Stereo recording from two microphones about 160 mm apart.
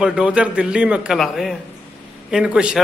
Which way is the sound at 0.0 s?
5° right (ahead or behind).